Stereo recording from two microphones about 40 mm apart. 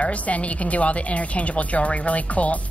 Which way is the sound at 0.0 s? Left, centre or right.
Left.